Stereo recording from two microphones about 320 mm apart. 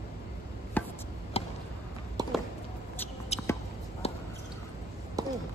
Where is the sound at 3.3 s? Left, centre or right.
Centre.